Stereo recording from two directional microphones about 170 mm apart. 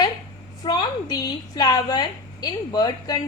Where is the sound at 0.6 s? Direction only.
25° left (ahead or behind).